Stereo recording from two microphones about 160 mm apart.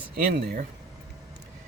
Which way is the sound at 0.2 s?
65° right (ahead or behind).